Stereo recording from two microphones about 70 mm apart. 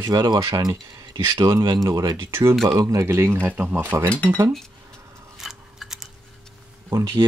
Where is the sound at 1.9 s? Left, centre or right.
Right.